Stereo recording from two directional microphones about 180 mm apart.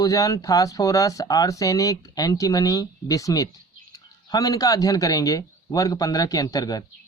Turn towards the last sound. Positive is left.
turn(degrees=20)  # may be behind; listen again after turning